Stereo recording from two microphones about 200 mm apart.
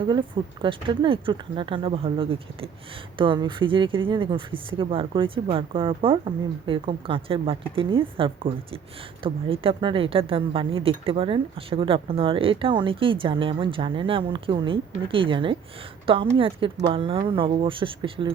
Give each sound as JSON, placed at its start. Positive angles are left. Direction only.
{"t": 0.0, "sound": "speech", "side_deg": -25}